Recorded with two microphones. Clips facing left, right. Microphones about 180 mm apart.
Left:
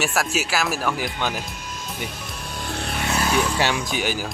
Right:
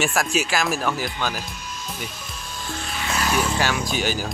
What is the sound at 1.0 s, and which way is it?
Speech, 20° left (ahead or behind).